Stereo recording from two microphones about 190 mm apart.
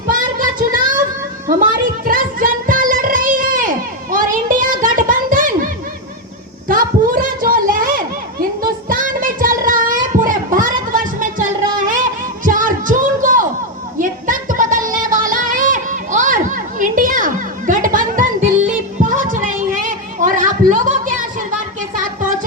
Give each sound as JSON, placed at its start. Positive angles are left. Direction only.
{"t": 0.1, "sound": "child singing", "side_deg": -45}
{"t": 1.5, "sound": "music", "side_deg": -45}
{"t": 6.7, "sound": "a sound", "side_deg": -45}